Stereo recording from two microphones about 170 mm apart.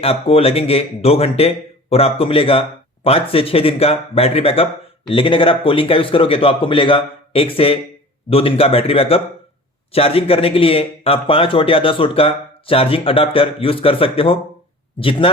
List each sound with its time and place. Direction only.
0.0 s speech: 35° left (ahead or behind)